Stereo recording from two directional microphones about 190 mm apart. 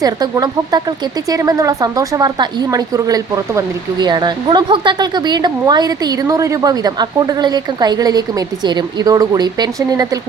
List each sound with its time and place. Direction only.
0.0 s speech: 20° right (ahead or behind)